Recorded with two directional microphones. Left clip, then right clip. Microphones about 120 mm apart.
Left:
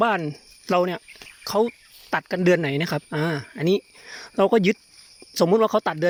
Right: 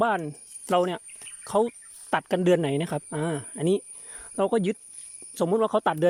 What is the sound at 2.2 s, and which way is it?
Speech, 10° right (ahead or behind).